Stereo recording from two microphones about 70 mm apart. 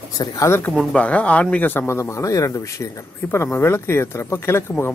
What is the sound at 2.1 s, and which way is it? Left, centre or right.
Speech, left.